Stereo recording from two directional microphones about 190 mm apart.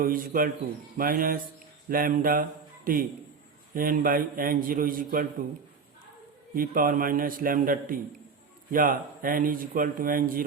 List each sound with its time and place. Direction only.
0.0 s a man's voice: 50° right (ahead or behind)
6.5 s a man's voice: 45° right (ahead or behind)